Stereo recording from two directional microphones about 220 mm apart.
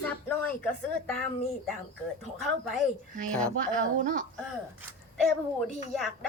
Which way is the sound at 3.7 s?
35° right (ahead or behind).